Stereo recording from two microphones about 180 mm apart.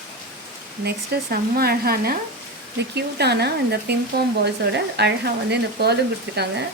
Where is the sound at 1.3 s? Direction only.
60° right (ahead or behind).